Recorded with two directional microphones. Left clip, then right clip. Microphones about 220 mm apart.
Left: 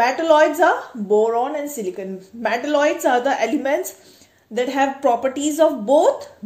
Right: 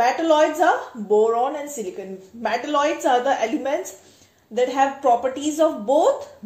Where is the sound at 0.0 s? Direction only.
40° left (ahead or behind).